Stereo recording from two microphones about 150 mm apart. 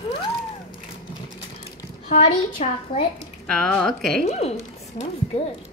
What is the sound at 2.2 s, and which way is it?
Speech, 40° left (ahead or behind).